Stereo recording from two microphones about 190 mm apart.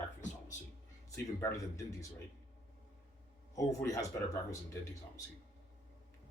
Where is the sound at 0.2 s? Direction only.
40° left (ahead or behind).